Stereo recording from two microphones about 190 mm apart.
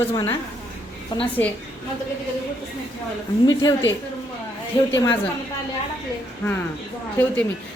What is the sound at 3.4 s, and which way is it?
Speech, 20° left (ahead or behind).